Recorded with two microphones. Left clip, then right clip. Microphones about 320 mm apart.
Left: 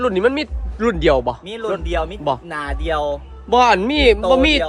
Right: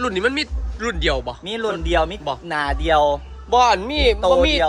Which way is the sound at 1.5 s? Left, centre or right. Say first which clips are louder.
Right 1 dB; right.